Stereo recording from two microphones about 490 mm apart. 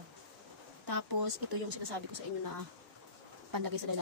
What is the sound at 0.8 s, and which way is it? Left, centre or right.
Speech, right.